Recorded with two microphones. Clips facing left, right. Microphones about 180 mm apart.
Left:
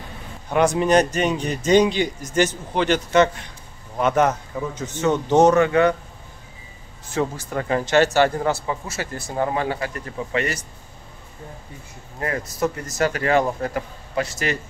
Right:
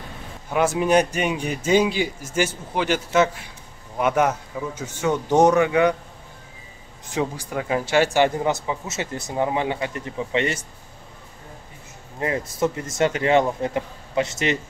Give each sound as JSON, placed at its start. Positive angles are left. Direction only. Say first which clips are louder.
{"t": 0.5, "sound": "a man's voice", "louder": "left 2 dB", "side_deg": -5}
{"t": 7.1, "sound": "a man's voice", "louder": "left 1 dB", "side_deg": -15}
{"t": 12.2, "sound": "speech", "louder": "right 1 dB", "side_deg": -20}